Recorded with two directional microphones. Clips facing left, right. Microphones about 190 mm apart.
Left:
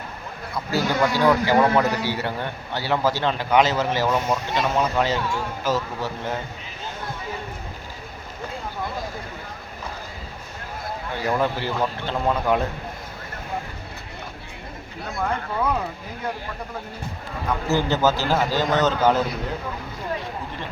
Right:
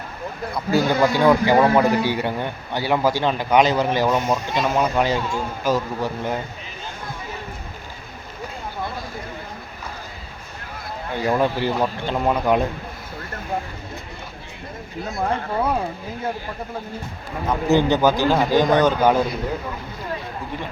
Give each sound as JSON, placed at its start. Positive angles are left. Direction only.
{"t": 0.7, "sound": "a man's voice", "side_deg": -15}
{"t": 11.2, "sound": "a man's voice", "side_deg": -15}
{"t": 15.2, "sound": "speech", "side_deg": -30}
{"t": 17.7, "sound": "a man's voice", "side_deg": -15}